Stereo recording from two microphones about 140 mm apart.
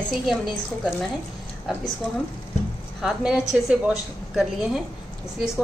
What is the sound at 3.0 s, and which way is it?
A woman's voice, 5° right (ahead or behind).